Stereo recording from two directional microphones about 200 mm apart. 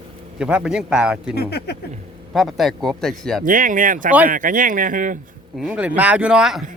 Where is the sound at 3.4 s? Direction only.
40° right (ahead or behind).